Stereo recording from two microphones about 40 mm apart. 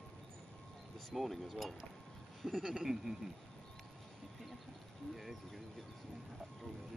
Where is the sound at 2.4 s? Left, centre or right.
Centre.